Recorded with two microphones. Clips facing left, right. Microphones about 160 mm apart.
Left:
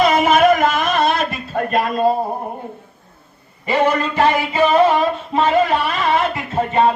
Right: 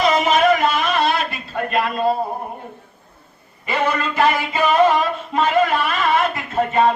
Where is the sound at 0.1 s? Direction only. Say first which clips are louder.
Left 3 dB; 55° left (ahead or behind).